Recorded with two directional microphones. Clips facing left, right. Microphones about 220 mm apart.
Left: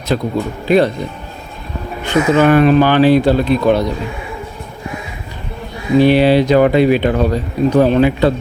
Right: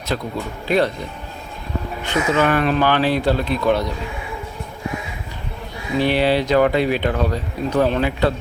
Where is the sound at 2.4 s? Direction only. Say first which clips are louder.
Left 8 dB; 15° left (ahead or behind).